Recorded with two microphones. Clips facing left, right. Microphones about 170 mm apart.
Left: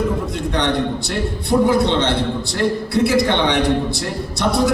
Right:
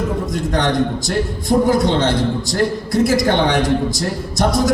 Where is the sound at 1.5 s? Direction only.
40° right (ahead or behind).